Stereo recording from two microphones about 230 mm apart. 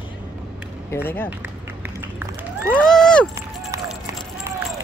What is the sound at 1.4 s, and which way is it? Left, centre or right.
Run, centre.